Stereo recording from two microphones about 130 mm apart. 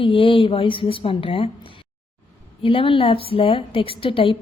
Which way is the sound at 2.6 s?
40° left (ahead or behind).